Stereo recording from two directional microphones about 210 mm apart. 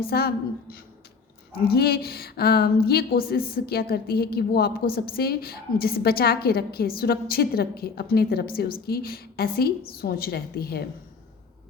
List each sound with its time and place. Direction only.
0.0 s a woman's voice: 45° left (ahead or behind)